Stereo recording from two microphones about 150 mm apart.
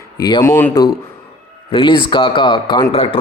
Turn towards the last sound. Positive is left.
turn(degrees=40)  # may be behind; listen again after turning